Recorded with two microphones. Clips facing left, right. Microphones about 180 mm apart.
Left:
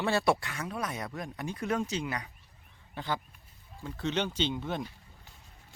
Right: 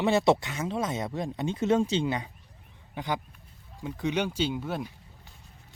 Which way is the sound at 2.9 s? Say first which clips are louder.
Right 3 dB; 15° right (ahead or behind).